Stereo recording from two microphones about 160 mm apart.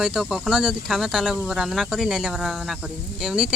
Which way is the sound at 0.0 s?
5° right (ahead or behind).